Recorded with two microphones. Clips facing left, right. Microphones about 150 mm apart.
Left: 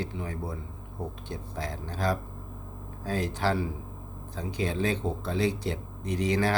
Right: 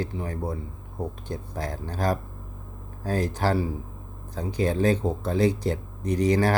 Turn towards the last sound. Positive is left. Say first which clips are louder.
# right 5 dB
turn(degrees=-45)  # may be behind; listen again after turning